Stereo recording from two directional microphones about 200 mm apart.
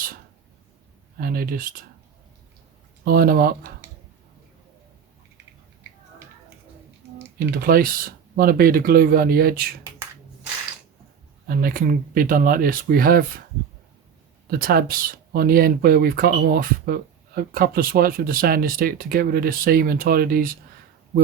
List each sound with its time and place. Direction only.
1.2 s speech: 45° right (ahead or behind)
3.0 s speech: 50° right (ahead or behind)
7.5 s speech: 50° right (ahead or behind)
11.4 s speech: 45° right (ahead or behind)
14.5 s speech: 50° right (ahead or behind)